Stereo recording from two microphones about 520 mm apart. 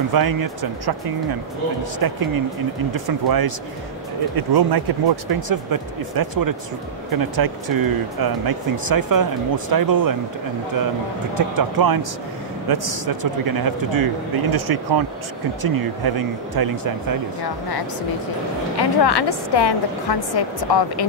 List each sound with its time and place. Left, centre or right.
0.1 s speech: right
11.3 s speech: right
18.9 s a woman's voice: left